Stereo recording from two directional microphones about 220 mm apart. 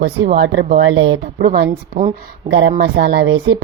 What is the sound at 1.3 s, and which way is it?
Speech, 40° right (ahead or behind).